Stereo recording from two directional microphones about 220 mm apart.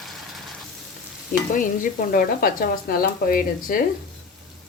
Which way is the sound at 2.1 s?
40° left (ahead or behind).